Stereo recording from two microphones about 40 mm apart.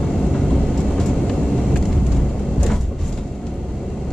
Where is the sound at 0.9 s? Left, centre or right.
Centre.